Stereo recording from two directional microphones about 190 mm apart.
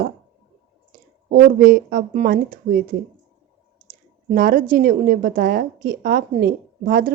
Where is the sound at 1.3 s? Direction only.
45° right (ahead or behind).